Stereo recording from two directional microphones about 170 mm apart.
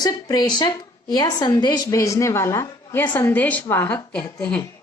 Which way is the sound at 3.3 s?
10° left (ahead or behind).